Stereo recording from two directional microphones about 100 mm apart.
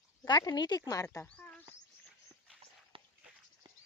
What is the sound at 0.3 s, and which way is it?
Speech, 45° left (ahead or behind).